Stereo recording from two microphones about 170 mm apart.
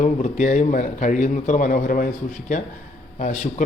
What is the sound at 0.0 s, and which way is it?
A man's voice, 45° left (ahead or behind).